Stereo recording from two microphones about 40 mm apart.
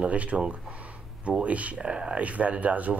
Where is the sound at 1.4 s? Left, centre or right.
Right.